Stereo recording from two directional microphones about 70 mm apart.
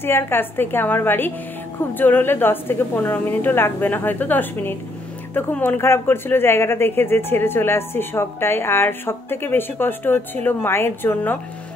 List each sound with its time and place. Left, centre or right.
0.0 s a woman's voice: left